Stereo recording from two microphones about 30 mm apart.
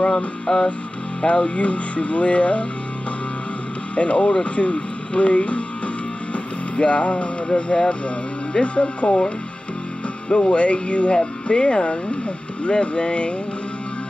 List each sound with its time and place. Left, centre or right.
0.5 s music: left
1.2 s speech: left
3.9 s speech: left
6.3 s music: left
7.4 s speech: left
10.3 s speech: left